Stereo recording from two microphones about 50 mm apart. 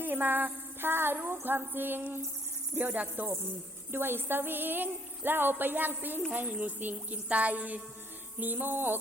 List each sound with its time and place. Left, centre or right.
0.0 s speech: right